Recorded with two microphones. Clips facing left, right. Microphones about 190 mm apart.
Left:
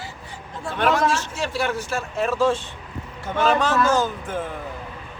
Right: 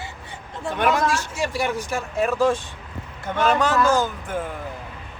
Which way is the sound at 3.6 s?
15° right (ahead or behind).